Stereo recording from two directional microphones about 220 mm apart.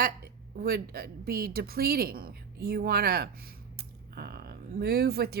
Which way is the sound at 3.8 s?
45° right (ahead or behind).